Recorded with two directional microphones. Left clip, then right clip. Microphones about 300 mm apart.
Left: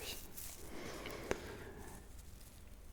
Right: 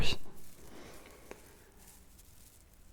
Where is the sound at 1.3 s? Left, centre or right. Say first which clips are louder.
Left 11 dB; left.